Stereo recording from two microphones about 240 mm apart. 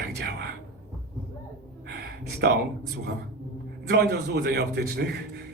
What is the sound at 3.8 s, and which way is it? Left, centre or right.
A man's voice, right.